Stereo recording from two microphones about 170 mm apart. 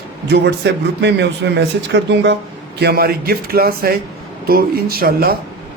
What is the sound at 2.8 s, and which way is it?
Speech, 70° right (ahead or behind).